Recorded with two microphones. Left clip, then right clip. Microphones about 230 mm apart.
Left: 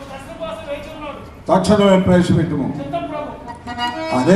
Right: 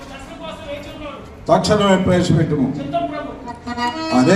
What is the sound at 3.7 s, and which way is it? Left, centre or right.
Music, right.